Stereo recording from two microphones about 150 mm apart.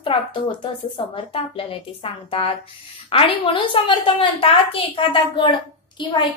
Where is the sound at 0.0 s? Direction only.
35° left (ahead or behind).